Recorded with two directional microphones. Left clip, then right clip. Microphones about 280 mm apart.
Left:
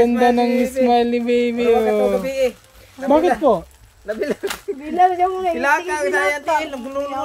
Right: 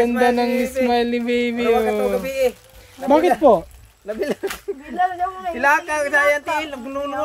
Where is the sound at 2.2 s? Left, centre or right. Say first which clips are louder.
Left 1 dB; centre.